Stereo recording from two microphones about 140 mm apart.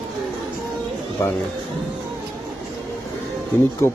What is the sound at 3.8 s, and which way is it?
Speech, 20° left (ahead or behind).